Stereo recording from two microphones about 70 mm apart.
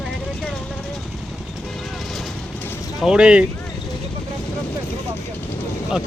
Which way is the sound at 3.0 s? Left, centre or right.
Centre.